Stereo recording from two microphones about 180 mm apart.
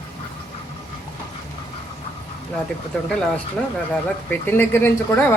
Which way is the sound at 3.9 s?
10° left (ahead or behind).